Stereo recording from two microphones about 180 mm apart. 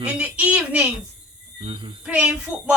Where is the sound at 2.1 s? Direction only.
5° right (ahead or behind).